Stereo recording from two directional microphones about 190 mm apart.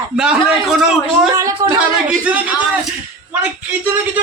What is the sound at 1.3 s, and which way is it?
A man's voice, 15° right (ahead or behind).